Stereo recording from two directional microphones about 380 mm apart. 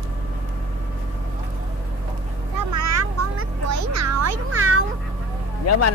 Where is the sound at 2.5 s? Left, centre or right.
Right.